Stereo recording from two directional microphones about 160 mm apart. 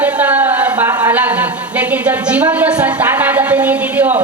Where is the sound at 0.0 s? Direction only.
10° right (ahead or behind).